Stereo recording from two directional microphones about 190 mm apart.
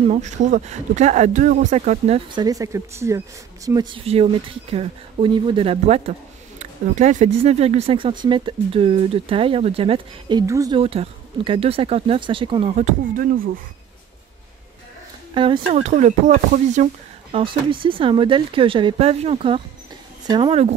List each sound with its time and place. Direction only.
0.0 s speech: 35° right (ahead or behind); by 10.8 s 15° right (ahead or behind)
10.8 s speech: 30° right (ahead or behind); by 13.5 s 45° right (ahead or behind)
15.3 s speech: 25° right (ahead or behind)